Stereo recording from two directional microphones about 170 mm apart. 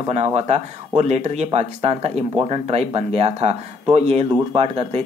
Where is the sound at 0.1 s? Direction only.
40° right (ahead or behind).